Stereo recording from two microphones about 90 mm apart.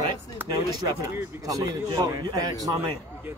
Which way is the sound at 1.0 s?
40° right (ahead or behind).